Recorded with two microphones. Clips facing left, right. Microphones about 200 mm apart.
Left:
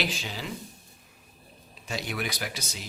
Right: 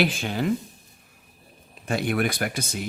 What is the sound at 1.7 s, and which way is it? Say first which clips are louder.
Speech: right 9 dB; 55° right (ahead or behind).